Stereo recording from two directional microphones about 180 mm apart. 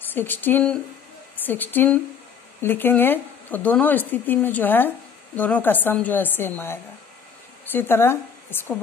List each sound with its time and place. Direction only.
0.1 s speech: 10° left (ahead or behind)